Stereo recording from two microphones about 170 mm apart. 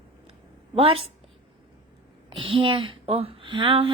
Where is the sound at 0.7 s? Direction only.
35° right (ahead or behind).